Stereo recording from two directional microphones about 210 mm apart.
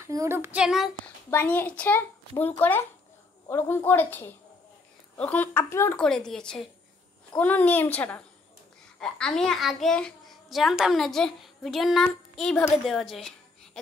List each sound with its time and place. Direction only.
0.0 s child singing: 15° right (ahead or behind)
1.3 s a child's voice: 10° left (ahead or behind)